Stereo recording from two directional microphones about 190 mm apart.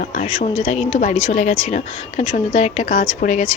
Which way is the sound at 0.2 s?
40° left (ahead or behind).